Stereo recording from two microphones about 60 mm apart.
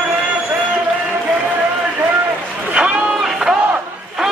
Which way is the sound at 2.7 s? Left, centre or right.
Right.